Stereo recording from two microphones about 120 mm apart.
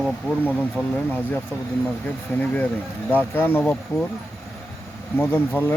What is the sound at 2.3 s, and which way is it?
Speech, 15° left (ahead or behind).